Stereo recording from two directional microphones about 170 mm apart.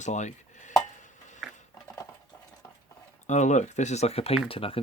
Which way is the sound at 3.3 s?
45° left (ahead or behind).